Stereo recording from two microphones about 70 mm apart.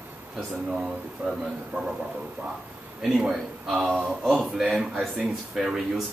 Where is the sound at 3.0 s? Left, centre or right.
Centre.